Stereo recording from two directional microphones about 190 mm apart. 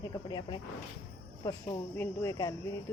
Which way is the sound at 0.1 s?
20° left (ahead or behind).